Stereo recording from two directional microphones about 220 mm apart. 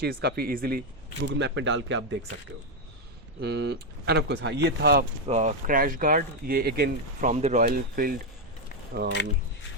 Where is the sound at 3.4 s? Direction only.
50° right (ahead or behind).